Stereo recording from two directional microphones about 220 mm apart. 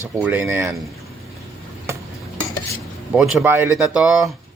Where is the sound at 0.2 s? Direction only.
5° right (ahead or behind).